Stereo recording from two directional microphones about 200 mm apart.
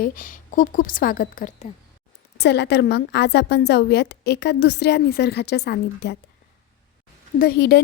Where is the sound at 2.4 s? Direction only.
60° left (ahead or behind).